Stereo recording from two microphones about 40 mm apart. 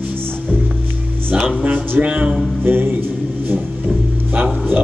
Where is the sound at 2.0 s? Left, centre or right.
Right.